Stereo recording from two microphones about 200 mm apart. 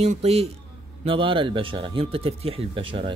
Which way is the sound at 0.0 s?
30° right (ahead or behind).